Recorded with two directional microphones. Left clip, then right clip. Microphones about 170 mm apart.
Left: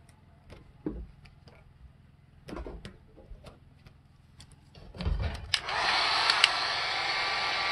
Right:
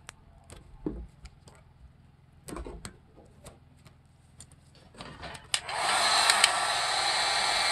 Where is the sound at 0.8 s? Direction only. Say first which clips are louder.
Right 1 dB; 5° right (ahead or behind).